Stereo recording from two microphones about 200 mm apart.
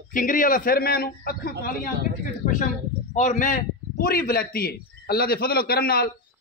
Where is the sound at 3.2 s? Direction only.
40° left (ahead or behind).